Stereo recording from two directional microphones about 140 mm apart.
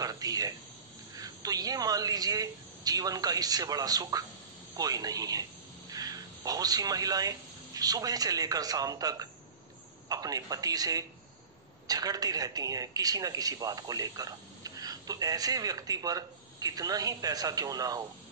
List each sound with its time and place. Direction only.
0.0 s cricket: 25° right (ahead or behind)
1.1 s a man's voice: 25° right (ahead or behind)